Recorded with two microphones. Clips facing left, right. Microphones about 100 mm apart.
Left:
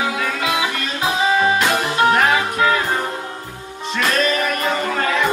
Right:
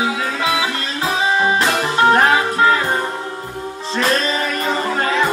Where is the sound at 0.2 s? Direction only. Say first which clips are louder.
Right 1 dB; 30° right (ahead or behind).